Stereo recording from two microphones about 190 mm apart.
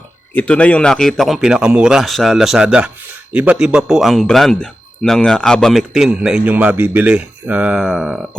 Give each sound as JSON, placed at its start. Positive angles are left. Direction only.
{"t": 0.3, "sound": "a man's voice", "side_deg": 5}